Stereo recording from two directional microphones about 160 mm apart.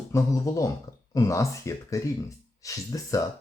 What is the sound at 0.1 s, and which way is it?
Speech, 20° left (ahead or behind).